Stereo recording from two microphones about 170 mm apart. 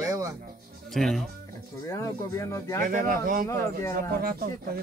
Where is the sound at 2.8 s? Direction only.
55° right (ahead or behind).